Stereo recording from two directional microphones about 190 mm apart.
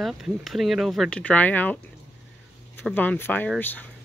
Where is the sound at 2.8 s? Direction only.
10° left (ahead or behind).